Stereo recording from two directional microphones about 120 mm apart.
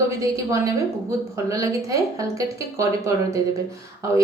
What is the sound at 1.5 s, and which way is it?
A woman's voice, 30° right (ahead or behind).